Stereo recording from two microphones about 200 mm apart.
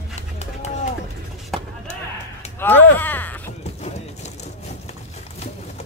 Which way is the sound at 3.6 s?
35° left (ahead or behind).